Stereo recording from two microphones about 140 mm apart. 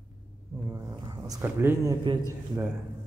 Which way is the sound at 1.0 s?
25° right (ahead or behind).